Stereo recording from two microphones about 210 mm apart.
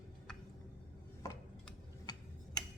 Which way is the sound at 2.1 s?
20° left (ahead or behind).